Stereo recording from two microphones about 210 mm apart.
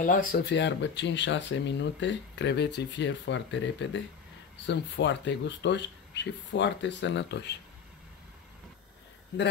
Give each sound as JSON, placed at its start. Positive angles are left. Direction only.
{"t": 0.0, "sound": "speech", "side_deg": 40}